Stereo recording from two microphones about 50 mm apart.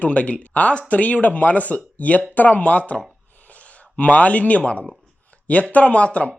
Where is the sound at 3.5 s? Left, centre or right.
Left.